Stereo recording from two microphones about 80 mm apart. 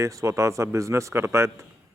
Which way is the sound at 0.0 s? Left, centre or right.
Right.